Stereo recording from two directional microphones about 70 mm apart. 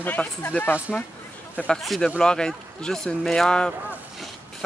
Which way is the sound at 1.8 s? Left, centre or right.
Centre.